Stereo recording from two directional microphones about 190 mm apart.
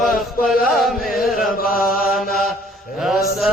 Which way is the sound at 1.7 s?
50° left (ahead or behind).